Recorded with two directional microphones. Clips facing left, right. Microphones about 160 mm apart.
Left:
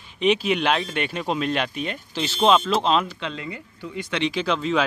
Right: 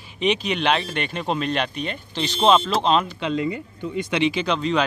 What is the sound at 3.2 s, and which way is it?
Speech, 20° right (ahead or behind).